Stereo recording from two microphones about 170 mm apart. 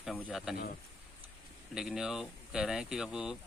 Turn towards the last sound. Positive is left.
turn(degrees=-5)  # may be behind; listen again after turning